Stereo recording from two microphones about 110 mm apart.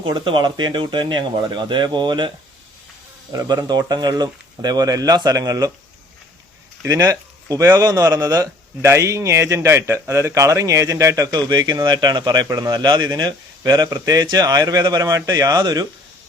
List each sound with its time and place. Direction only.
0.0 s speech: 50° right (ahead or behind)
3.3 s speech: 40° right (ahead or behind)
6.8 s speech: 30° right (ahead or behind)
12.7 s speech: 40° right (ahead or behind)